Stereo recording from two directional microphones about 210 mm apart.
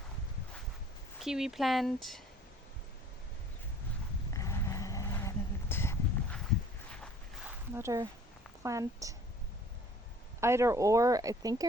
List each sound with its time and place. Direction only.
1.2 s speech: centre (ahead or behind)
4.4 s a sound: 15° left (ahead or behind)
7.8 s speech: 15° right (ahead or behind)
10.4 s speech: 15° right (ahead or behind)